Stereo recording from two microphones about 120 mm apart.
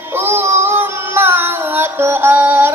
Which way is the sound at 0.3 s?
20° right (ahead or behind).